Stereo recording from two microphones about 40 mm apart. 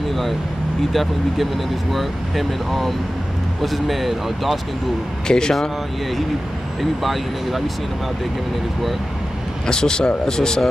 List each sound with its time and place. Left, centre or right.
0.9 s speech: centre
5.3 s speech: centre
6.8 s speech: centre
9.7 s speech: centre